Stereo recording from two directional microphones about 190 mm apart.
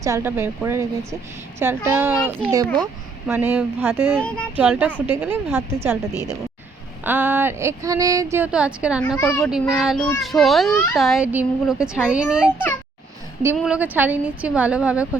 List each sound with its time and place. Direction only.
0.0 s speech: 15° right (ahead or behind)
3.3 s speech: 10° right (ahead or behind)
4.2 s a woman's voice: 5° left (ahead or behind)
4.5 s speech: 10° right (ahead or behind)
7.0 s speech: 10° right (ahead or behind)
9.1 s a child's voice: 10° left (ahead or behind)
9.4 s a woman's voice: 5° right (ahead or behind)